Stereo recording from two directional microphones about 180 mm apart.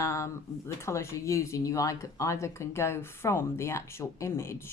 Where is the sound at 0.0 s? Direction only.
15° left (ahead or behind).